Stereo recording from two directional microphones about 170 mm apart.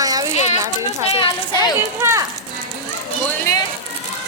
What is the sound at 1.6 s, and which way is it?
Speech, 15° right (ahead or behind).